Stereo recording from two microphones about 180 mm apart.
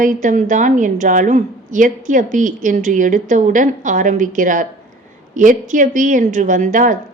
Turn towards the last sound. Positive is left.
turn(degrees=-45)  # may be behind; listen again after turning